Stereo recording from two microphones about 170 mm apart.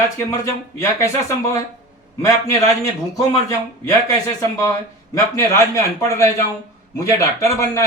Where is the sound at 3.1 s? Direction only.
20° left (ahead or behind).